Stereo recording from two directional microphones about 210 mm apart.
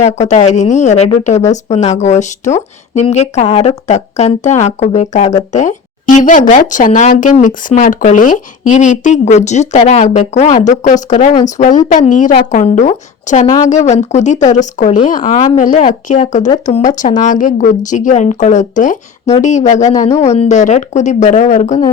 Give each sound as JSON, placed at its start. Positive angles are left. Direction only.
{"t": 0.0, "sound": "a woman's voice", "side_deg": 35}